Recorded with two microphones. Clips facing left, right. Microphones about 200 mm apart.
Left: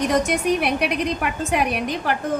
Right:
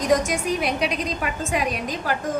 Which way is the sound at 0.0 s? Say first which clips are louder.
Left 1 dB; 65° left (ahead or behind).